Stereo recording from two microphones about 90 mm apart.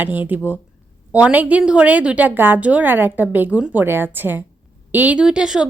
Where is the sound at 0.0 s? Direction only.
20° right (ahead or behind).